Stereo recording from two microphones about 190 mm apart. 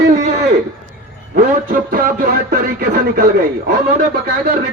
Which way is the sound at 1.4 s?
50° right (ahead or behind).